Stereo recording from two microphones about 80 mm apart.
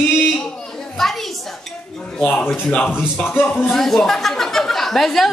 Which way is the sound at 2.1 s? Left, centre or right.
Centre.